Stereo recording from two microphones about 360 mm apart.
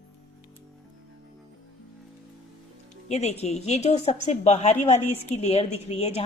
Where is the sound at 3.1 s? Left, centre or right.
Centre.